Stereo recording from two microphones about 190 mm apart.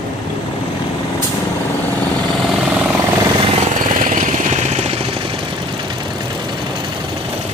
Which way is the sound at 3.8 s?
45° right (ahead or behind).